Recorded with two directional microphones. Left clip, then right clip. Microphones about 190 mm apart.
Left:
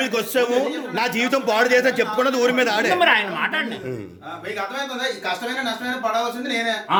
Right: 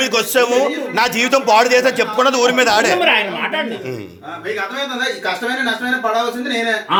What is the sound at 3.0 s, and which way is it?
Speech, 35° left (ahead or behind).